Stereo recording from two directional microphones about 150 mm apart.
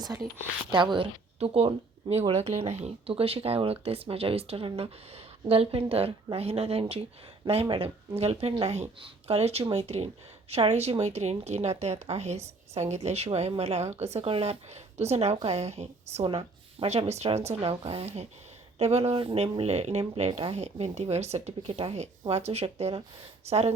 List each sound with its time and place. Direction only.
0.7 s a woman's voice: 30° right (ahead or behind)